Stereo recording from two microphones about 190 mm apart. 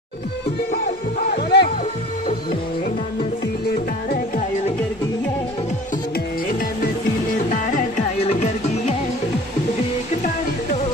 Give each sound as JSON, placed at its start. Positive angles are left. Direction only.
{"t": 0.8, "sound": "music", "side_deg": 60}
{"t": 4.1, "sound": "music", "side_deg": 40}
{"t": 7.7, "sound": "music", "side_deg": 35}